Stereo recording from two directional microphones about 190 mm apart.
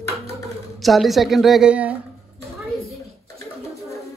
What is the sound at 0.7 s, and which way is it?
Speech, centre (ahead or behind).